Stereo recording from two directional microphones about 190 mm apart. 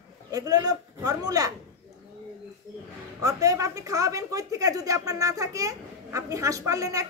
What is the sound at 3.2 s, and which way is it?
Speech, 15° right (ahead or behind).